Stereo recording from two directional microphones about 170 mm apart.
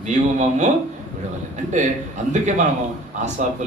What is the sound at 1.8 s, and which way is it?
Speech, 45° right (ahead or behind).